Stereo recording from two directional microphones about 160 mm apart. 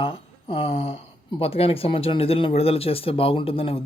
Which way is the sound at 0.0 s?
35° left (ahead or behind).